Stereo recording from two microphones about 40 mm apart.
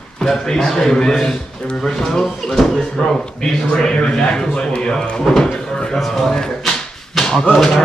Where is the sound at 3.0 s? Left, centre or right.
Left.